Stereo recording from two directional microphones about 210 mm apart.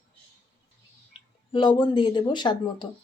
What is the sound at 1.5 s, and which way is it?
A woman's voice, 20° left (ahead or behind).